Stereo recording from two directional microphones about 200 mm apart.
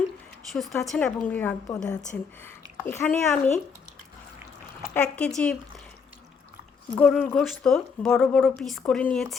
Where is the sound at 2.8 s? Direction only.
10° left (ahead or behind).